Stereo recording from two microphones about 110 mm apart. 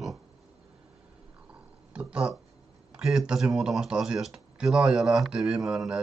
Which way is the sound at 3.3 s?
5° right (ahead or behind).